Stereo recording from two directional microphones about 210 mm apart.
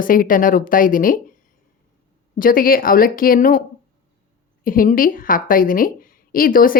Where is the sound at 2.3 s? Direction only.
40° left (ahead or behind).